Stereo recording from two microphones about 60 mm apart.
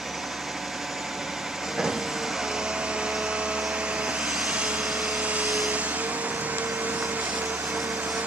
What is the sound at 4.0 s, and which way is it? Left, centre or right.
Vehicle, centre.